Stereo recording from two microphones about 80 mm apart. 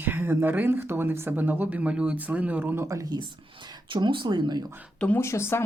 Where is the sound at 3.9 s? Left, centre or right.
Right.